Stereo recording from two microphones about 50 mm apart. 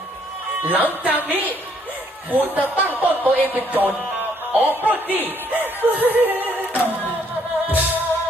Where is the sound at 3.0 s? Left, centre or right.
Right.